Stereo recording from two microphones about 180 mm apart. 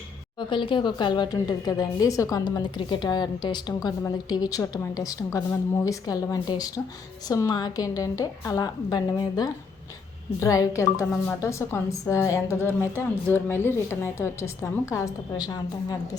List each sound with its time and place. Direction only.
0.3 s a woman's voice: 25° left (ahead or behind)